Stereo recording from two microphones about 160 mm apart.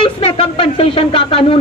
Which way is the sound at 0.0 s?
35° left (ahead or behind).